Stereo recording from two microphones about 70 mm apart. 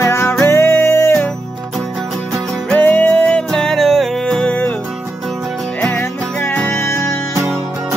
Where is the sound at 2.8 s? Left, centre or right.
Left.